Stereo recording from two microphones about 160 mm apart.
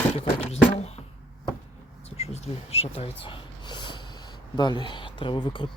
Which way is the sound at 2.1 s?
40° left (ahead or behind).